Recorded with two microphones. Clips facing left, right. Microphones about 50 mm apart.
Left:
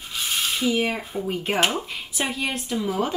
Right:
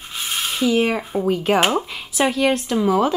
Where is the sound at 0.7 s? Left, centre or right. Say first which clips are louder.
Right 7 dB; right.